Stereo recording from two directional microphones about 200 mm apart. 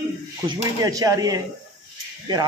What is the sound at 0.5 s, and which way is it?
A man's voice, 20° right (ahead or behind).